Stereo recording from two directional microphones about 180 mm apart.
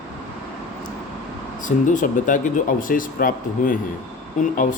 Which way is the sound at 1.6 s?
45° left (ahead or behind).